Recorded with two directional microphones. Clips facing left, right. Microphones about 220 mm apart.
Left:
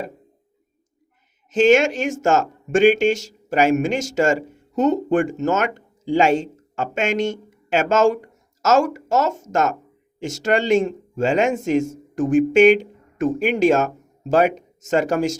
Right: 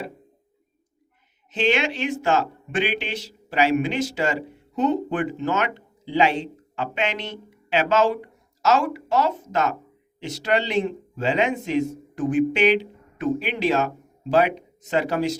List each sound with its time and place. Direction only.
1.5 s a man's voice: 45° left (ahead or behind)